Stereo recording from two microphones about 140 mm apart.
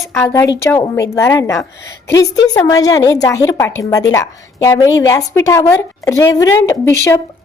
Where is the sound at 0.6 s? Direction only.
20° left (ahead or behind).